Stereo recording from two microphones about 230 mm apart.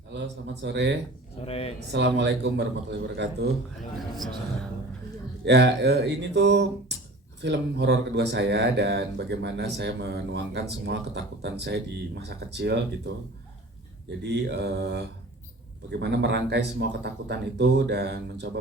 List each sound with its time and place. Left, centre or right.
0.1 s speech: right
1.4 s speech: left
1.9 s speech: right
5.5 s speech: right
14.3 s speech: right